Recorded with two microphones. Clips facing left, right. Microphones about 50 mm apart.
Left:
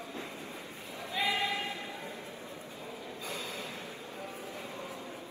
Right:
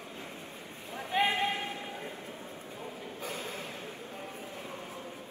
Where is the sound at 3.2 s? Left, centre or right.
Right.